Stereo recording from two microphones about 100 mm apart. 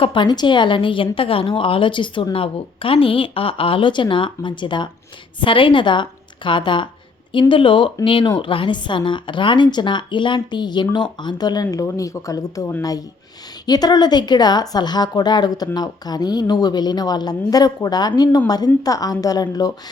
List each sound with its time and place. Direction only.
0.0 s speech: 55° left (ahead or behind)
2.3 s a woman's voice: 65° left (ahead or behind); by 19.7 s 40° left (ahead or behind)